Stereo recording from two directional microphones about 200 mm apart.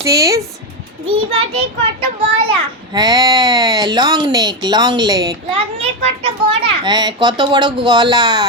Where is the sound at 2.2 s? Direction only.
25° right (ahead or behind).